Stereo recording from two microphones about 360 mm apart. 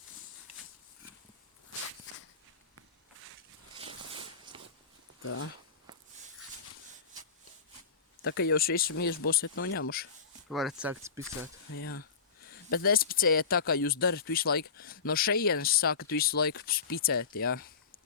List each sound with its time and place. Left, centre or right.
3.8 s a sound: centre
5.2 s speech: left
8.2 s speech: left
10.5 s speech: centre
11.7 s speech: left